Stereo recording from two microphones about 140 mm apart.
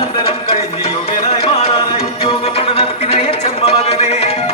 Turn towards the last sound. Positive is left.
turn(degrees=50)  # may be behind; listen again after turning